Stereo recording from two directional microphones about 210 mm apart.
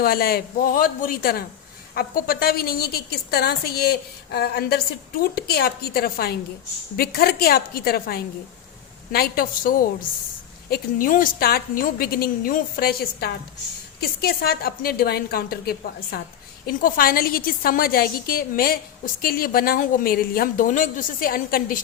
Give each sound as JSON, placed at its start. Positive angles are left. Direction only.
{"t": 0.0, "sound": "a woman's voice", "side_deg": 45}